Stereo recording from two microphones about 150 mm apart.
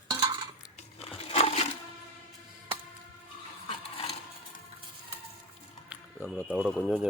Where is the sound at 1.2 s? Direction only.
40° left (ahead or behind).